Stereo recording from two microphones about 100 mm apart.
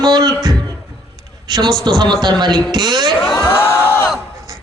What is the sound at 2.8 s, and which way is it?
Speech, 45° right (ahead or behind).